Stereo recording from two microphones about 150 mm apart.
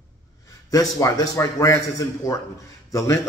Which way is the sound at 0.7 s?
25° left (ahead or behind).